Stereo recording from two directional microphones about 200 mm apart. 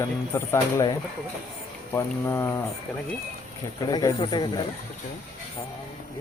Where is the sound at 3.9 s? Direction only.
20° left (ahead or behind).